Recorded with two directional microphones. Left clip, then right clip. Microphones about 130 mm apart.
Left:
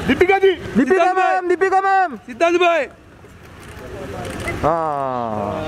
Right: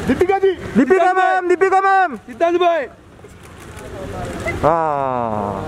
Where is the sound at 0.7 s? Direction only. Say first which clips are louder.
Right 2 dB; 5° right (ahead or behind).